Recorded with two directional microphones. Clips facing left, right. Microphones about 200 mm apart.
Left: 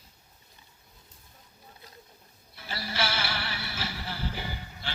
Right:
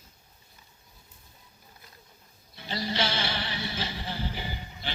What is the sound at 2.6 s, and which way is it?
Music, 20° right (ahead or behind).